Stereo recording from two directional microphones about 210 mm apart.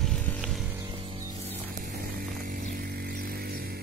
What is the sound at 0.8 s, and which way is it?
Music, 20° right (ahead or behind).